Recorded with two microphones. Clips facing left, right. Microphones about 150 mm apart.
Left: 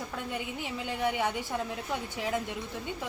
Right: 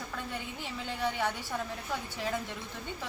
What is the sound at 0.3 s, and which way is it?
A woman's voice, 15° left (ahead or behind).